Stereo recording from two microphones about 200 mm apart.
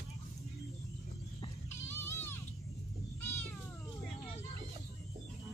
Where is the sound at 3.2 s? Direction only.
10° left (ahead or behind).